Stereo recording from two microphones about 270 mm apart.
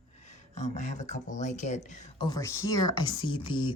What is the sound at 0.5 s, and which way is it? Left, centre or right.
Speech, left.